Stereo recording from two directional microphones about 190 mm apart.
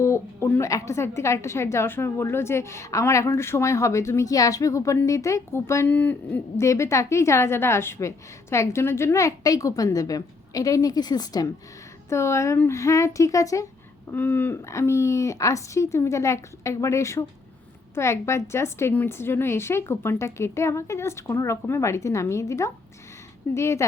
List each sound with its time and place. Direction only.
0.0 s a woman's voice: 15° left (ahead or behind)